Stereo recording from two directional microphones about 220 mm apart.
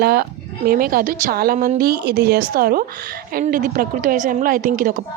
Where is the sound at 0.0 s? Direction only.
45° right (ahead or behind).